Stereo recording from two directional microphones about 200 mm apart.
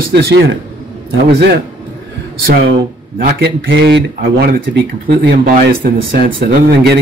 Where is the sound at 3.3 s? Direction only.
55° right (ahead or behind).